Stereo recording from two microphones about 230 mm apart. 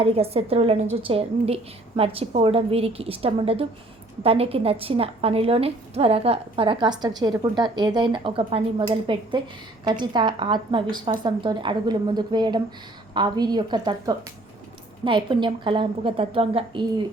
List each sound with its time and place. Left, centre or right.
0.0 s a woman's voice: right